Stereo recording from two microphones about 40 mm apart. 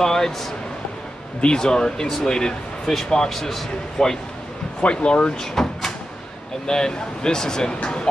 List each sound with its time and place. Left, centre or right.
0.0 s speech: centre
4.8 s speech: left
5.4 s cupboard open or close: centre
6.7 s speech: centre